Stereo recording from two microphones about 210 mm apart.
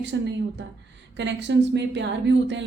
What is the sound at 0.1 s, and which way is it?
A woman's voice, 55° right (ahead or behind).